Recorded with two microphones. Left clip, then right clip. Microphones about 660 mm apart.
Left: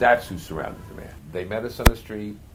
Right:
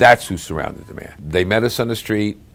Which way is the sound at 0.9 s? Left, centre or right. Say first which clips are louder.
Right 6 dB; right.